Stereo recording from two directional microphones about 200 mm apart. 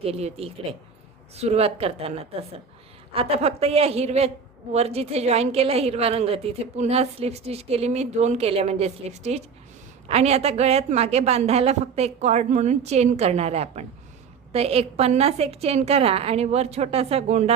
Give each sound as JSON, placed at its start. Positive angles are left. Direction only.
{"t": 0.0, "sound": "a woman's voice", "side_deg": -30}